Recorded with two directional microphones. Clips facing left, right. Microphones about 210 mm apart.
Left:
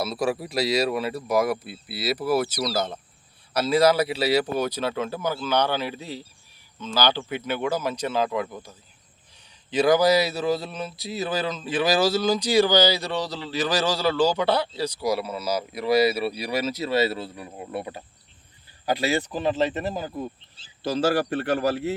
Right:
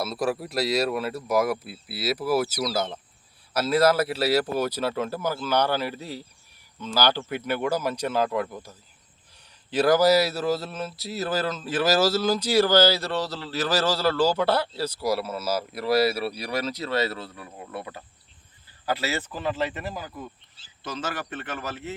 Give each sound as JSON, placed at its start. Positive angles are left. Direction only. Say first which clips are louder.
{"t": 0.0, "sound": "a man's voice", "louder": "left 1 dB", "side_deg": 0}